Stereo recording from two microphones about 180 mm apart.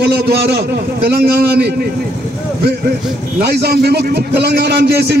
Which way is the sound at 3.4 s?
65° right (ahead or behind).